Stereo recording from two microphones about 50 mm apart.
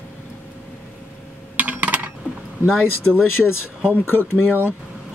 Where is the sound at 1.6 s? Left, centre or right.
Right.